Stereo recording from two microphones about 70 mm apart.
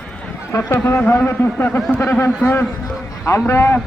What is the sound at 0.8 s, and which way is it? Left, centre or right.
A man's voice, left.